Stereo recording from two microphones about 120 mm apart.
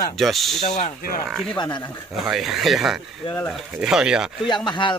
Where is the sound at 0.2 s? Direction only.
Centre (ahead or behind).